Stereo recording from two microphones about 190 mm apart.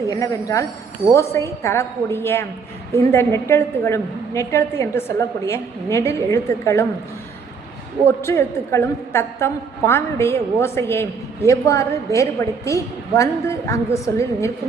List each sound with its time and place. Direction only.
0.1 s a woman's voice: 15° left (ahead or behind)
8.0 s a woman's voice: 15° left (ahead or behind)